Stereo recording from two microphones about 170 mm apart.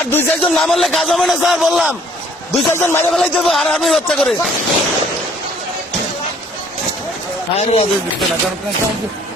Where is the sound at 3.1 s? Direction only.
Centre (ahead or behind).